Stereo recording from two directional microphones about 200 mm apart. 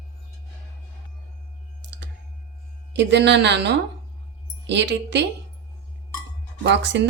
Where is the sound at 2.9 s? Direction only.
60° right (ahead or behind).